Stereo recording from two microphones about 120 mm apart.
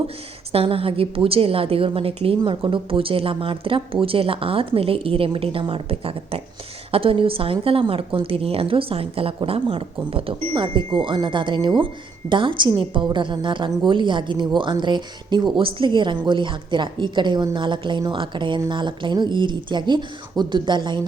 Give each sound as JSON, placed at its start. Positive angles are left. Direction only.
{"t": 0.5, "sound": "a woman's voice", "side_deg": -50}